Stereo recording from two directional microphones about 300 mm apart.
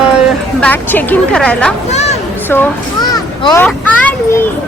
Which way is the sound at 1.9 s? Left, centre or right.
Left.